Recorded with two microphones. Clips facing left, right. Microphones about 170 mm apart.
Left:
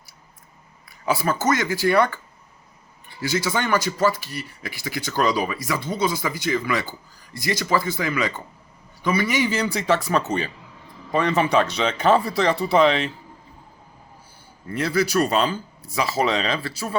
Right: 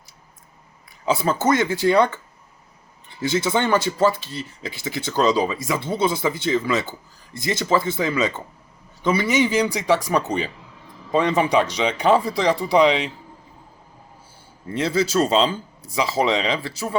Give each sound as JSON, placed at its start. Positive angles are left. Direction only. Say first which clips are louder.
{"t": 1.0, "sound": "speech", "louder": "right 2 dB", "side_deg": -20}
{"t": 14.7, "sound": "speech", "louder": "right 1 dB", "side_deg": -25}